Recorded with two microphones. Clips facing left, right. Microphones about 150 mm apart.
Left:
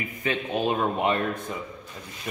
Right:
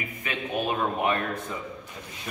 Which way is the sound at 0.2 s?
25° left (ahead or behind).